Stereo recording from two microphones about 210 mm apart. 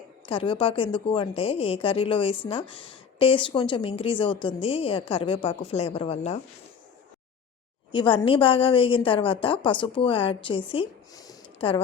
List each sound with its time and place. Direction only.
0.3 s a woman's voice: 25° left (ahead or behind)
7.9 s a woman's voice: 25° left (ahead or behind)